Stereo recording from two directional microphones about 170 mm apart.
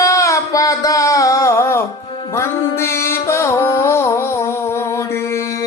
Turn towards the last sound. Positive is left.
turn(degrees=15)  # may be behind; listen again after turning